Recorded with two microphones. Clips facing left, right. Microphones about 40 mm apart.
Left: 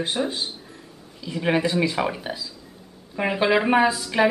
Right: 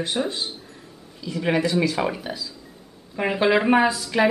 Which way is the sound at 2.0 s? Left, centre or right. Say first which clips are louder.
Even; centre.